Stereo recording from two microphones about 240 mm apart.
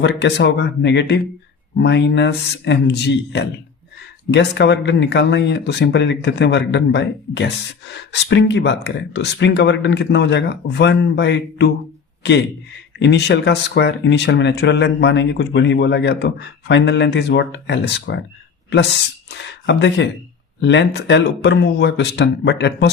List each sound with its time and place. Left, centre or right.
0.0 s a man's voice: left
19.3 s speech: left